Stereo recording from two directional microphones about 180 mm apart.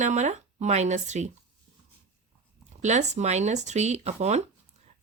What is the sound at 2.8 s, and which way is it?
A woman's voice, 40° right (ahead or behind).